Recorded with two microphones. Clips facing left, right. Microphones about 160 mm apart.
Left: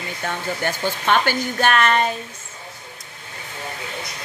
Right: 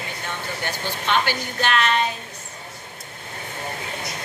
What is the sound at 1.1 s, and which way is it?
Speech, 50° left (ahead or behind).